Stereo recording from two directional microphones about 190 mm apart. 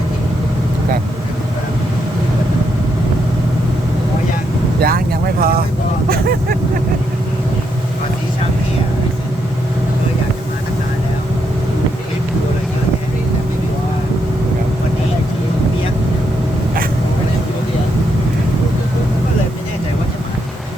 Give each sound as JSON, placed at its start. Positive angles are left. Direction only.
{"t": 4.8, "sound": "vehicle", "side_deg": -50}